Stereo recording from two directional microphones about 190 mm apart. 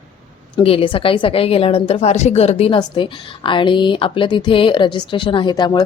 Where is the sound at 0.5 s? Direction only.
30° left (ahead or behind).